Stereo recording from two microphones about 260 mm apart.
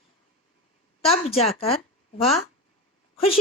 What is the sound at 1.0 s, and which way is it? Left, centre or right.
Speech, left.